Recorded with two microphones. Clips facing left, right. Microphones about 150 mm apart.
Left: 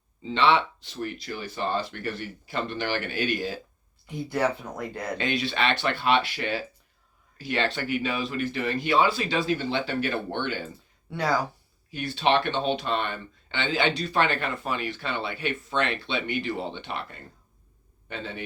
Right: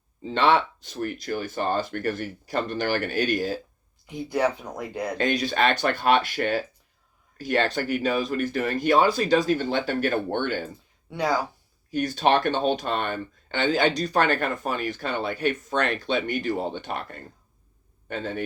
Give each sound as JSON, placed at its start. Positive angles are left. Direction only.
{"t": 0.2, "sound": "speech", "side_deg": -45}
{"t": 4.0, "sound": "speech", "side_deg": -15}
{"t": 5.1, "sound": "speech", "side_deg": -45}
{"t": 11.1, "sound": "speech", "side_deg": -15}
{"t": 11.9, "sound": "speech", "side_deg": -45}